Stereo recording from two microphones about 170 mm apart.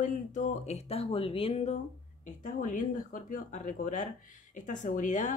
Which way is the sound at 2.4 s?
50° left (ahead or behind).